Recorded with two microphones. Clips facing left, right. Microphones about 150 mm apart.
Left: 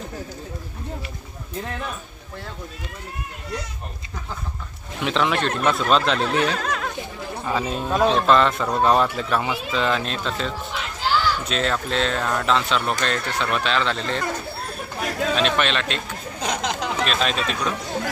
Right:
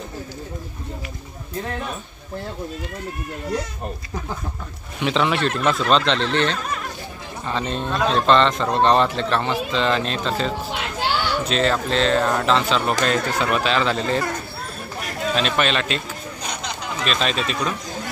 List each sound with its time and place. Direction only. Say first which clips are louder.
5.0 s speech: right 1 dB; centre (ahead or behind)
6.5 s speech: left 2 dB; 90° left
7.4 s a man's voice: even; 10° left (ahead or behind)
10.7 s speech: right 4 dB; 65° right (ahead or behind)
11.4 s speech: right 4 dB; centre (ahead or behind)
15.3 s speech: right 2 dB; centre (ahead or behind)
16.3 s chatter: left 8 dB; 90° left
17.0 s speech: right 2 dB; centre (ahead or behind)